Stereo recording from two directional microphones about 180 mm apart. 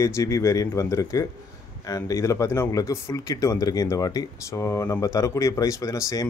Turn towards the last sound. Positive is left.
turn(degrees=20)  # may be behind; listen again after turning